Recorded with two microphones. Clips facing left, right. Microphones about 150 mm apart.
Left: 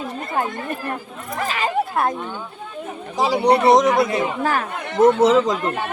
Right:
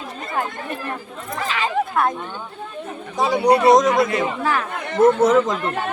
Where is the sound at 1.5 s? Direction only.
40° left (ahead or behind).